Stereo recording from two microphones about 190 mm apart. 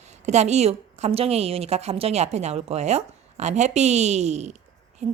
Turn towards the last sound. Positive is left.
turn(degrees=-35)  # may be behind; listen again after turning